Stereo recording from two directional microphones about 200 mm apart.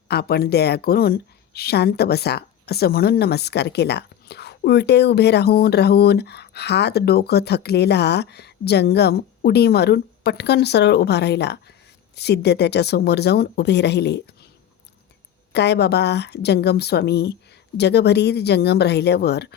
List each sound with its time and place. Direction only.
0.1 s a woman's voice: 50° left (ahead or behind)
15.5 s a woman's voice: 55° left (ahead or behind)